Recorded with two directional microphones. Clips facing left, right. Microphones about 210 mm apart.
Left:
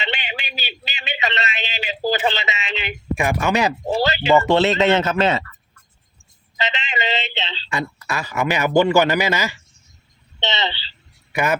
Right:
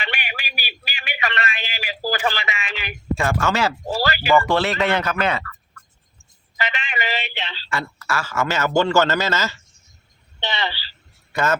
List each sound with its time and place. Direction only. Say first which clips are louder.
0.0 s a man's voice: left 3 dB; 25° left (ahead or behind)
6.6 s a man's voice: left 2 dB; 25° left (ahead or behind)
10.4 s a sound: left 2 dB; 25° left (ahead or behind)